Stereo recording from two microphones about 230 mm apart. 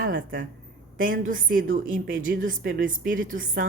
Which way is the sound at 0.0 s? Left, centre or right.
Right.